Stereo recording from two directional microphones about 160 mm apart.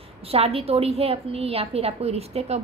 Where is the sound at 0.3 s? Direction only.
40° right (ahead or behind).